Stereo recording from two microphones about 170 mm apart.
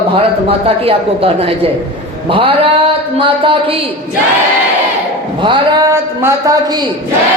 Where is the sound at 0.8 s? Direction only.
35° right (ahead or behind).